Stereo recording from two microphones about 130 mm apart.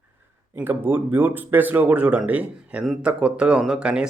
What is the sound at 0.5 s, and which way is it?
Speech, 15° right (ahead or behind).